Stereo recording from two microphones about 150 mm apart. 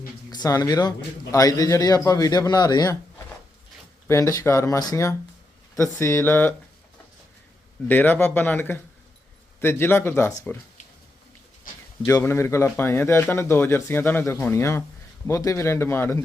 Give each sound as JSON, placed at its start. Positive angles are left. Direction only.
{"t": 0.3, "sound": "a man's voice", "side_deg": 25}
{"t": 4.1, "sound": "a man's voice", "side_deg": 20}
{"t": 7.9, "sound": "speech", "side_deg": 10}
{"t": 12.0, "sound": "speech", "side_deg": 15}